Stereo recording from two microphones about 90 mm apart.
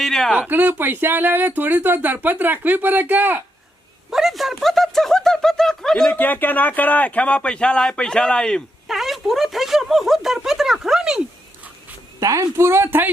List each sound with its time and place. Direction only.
0.0 s speech: 5° left (ahead or behind)
0.3 s speech: 20° right (ahead or behind)
4.1 s speech: 5° right (ahead or behind)
6.1 s speech: 20° left (ahead or behind)
8.9 s speech: centre (ahead or behind)
12.2 s speech: 40° right (ahead or behind)